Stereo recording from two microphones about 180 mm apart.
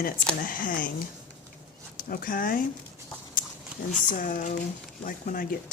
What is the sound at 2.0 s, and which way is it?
Speech, 50° left (ahead or behind).